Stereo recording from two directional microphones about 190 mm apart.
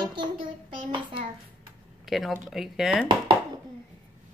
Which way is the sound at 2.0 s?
Centre (ahead or behind).